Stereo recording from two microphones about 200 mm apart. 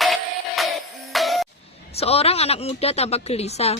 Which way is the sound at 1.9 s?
30° left (ahead or behind).